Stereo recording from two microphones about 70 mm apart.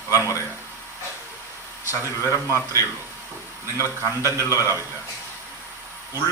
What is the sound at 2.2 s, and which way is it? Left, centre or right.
Speech, left.